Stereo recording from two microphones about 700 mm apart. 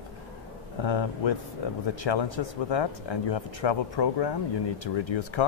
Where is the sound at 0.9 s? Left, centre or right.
Left.